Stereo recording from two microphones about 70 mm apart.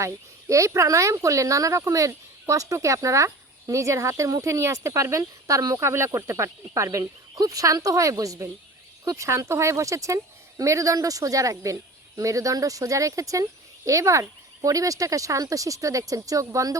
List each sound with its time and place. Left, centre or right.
0.0 s speech: right